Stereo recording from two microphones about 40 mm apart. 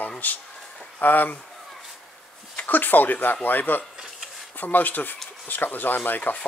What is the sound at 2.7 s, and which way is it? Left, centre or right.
Speech, left.